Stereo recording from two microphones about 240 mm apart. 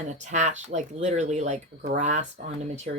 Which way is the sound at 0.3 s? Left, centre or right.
Right.